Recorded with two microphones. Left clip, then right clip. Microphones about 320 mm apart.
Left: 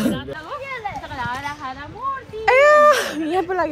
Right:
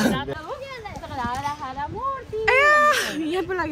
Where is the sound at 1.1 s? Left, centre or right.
Right.